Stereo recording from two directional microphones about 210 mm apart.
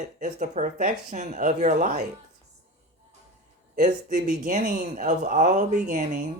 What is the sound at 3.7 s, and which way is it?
Speech, 35° right (ahead or behind).